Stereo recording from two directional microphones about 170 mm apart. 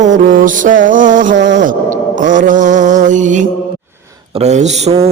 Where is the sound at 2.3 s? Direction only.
50° right (ahead or behind).